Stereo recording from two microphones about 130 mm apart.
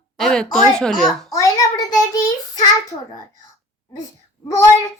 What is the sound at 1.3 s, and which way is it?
Child singing, 25° left (ahead or behind).